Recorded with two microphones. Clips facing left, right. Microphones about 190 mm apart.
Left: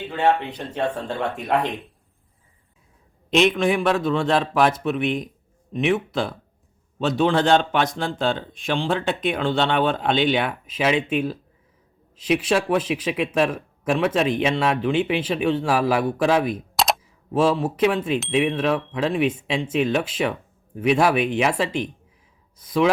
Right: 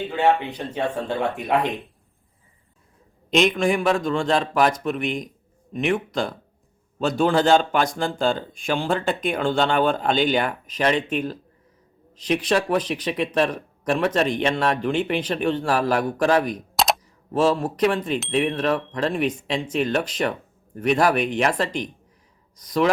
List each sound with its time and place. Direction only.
0.9 s speech: centre (ahead or behind)
3.2 s speech: centre (ahead or behind)